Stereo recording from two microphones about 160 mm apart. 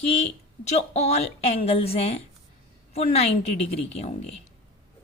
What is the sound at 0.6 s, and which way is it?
A woman's voice, 45° left (ahead or behind).